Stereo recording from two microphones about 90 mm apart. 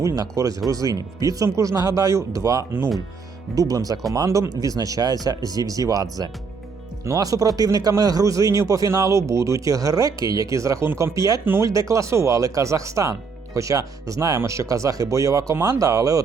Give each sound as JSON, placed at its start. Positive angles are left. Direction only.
{"t": 0.0, "sound": "speech", "side_deg": -35}